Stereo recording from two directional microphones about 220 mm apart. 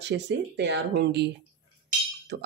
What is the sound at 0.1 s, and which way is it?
Speech, 45° right (ahead or behind).